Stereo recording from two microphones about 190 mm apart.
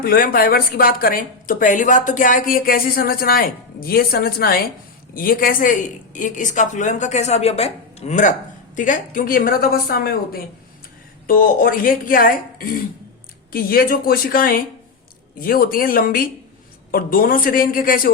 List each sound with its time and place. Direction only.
0.0 s a woman's voice: 50° left (ahead or behind)